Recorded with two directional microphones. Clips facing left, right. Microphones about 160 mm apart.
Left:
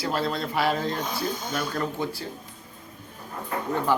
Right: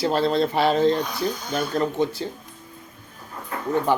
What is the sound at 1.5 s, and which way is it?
Speech, 25° right (ahead or behind).